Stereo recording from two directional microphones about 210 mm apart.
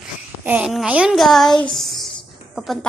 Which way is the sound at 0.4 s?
5° right (ahead or behind).